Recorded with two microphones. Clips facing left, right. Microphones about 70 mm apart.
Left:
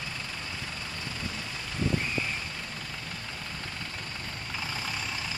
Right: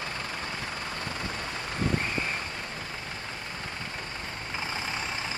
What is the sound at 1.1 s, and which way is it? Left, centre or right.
Vehicle, right.